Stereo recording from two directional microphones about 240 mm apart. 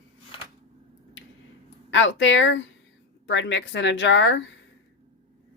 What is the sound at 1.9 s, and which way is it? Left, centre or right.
Speech, left.